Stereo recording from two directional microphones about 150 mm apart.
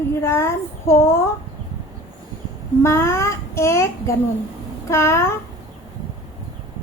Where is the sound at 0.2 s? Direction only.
15° left (ahead or behind).